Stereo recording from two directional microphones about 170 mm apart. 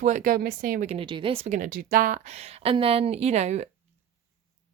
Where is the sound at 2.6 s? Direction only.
35° right (ahead or behind).